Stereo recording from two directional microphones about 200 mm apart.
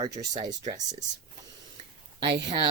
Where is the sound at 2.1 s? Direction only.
25° right (ahead or behind).